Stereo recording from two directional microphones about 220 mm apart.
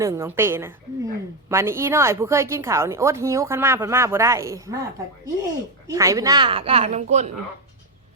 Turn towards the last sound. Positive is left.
turn(degrees=-30)  # may be behind; listen again after turning